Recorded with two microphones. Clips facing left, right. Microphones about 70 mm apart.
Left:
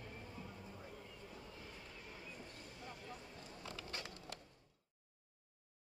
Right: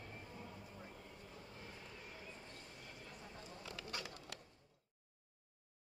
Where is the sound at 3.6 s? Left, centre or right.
Left.